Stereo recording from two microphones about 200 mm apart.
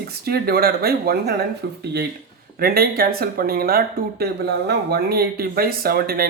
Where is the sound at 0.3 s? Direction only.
50° right (ahead or behind).